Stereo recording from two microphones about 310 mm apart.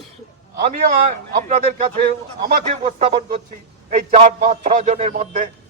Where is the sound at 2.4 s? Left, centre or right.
Right.